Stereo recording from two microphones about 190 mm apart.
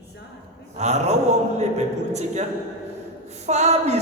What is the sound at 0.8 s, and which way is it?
A man's voice, 35° right (ahead or behind).